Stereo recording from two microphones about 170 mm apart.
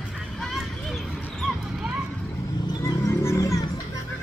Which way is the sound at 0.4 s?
Centre (ahead or behind).